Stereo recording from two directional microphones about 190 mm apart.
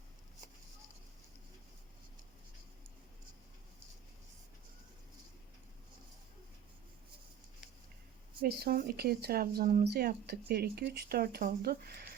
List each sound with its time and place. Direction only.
8.4 s speech: 55° right (ahead or behind)